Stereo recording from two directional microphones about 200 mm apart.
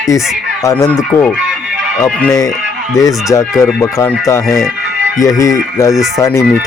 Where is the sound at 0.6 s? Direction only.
15° left (ahead or behind).